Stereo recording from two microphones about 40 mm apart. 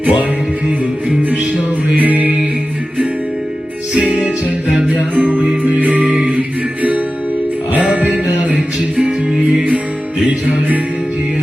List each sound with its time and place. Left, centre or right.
0.0 s music: right
2.0 s music: right
5.6 s music: right
6.0 s music: right
9.0 s music: centre
10.2 s music: right